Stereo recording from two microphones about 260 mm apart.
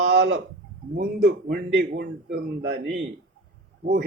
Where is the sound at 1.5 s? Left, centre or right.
Right.